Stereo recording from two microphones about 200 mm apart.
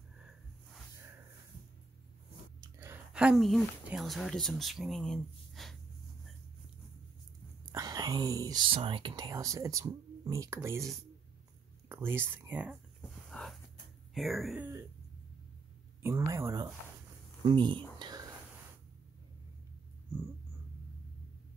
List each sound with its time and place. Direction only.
2.6 s speech: 15° right (ahead or behind)
7.7 s speech: 20° right (ahead or behind)
13.3 s a sound: 5° left (ahead or behind)
14.1 s speech: centre (ahead or behind)
16.0 s speech: 15° right (ahead or behind)
17.9 s whispering: 20° right (ahead or behind)